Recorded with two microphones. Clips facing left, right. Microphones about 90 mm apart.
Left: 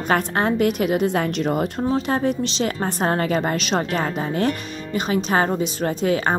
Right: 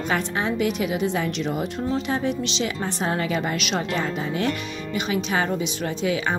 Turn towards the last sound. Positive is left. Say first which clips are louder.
# left 4 dB
turn(degrees=45)  # may be behind; listen again after turning